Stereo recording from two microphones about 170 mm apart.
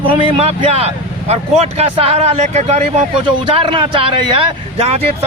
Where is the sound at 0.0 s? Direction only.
35° right (ahead or behind).